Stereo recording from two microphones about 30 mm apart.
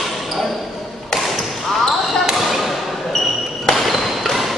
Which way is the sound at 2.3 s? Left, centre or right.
Centre.